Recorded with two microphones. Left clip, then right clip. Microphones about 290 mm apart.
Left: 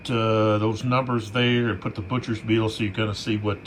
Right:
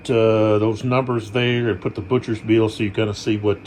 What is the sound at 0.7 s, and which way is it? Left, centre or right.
Speech, centre.